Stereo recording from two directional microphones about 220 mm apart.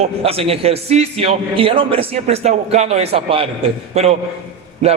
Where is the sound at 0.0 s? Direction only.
25° right (ahead or behind).